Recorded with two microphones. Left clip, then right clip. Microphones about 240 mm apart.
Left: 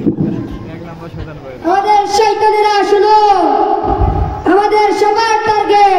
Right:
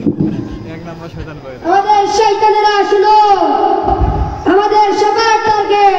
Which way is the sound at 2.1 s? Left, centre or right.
Left.